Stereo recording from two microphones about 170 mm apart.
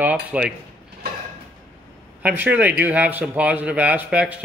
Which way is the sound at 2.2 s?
10° right (ahead or behind).